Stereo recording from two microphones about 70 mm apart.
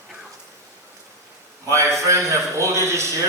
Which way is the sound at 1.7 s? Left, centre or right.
Right.